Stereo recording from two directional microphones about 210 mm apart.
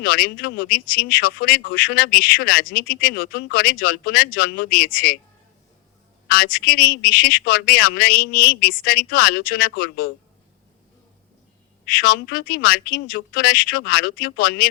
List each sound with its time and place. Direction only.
0.0 s speech: 45° left (ahead or behind)
6.4 s speech: 45° left (ahead or behind)
11.9 s speech: 45° left (ahead or behind)